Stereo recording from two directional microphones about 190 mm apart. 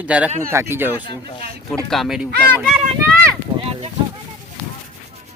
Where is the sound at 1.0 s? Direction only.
25° left (ahead or behind).